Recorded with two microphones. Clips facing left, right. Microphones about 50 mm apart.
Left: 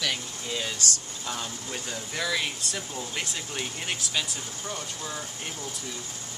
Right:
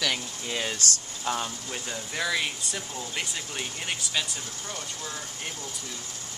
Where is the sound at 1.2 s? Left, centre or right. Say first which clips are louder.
Right 6 dB; right.